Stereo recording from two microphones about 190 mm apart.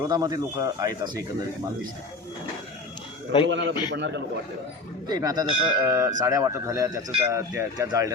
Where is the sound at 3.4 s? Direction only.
70° right (ahead or behind).